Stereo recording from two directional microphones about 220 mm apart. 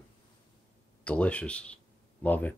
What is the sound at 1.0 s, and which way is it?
Speech, 5° left (ahead or behind).